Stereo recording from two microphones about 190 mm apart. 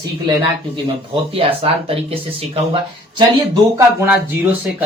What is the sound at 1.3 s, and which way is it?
Speech, 30° right (ahead or behind).